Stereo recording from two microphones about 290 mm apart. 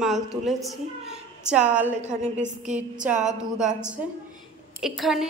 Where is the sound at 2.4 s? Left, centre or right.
Right.